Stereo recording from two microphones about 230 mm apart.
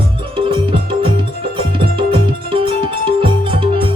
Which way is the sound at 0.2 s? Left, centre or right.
Right.